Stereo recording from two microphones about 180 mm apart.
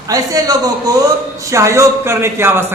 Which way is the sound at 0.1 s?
20° right (ahead or behind).